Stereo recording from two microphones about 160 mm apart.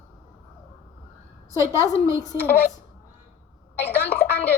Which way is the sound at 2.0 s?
20° right (ahead or behind).